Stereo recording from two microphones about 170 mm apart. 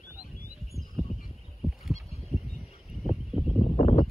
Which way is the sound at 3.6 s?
35° left (ahead or behind).